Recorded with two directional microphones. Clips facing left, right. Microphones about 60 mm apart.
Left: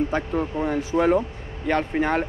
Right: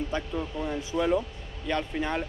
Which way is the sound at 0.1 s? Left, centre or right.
Left.